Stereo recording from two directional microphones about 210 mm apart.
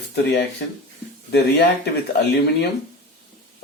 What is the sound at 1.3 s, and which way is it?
Speech, 55° left (ahead or behind).